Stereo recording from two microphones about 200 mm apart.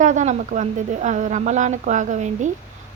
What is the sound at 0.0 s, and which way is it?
Speech, 40° right (ahead or behind).